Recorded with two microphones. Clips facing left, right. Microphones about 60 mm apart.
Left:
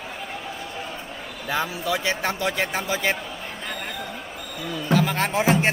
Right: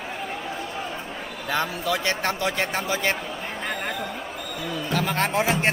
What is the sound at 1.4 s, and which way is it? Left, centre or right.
A man's voice, centre.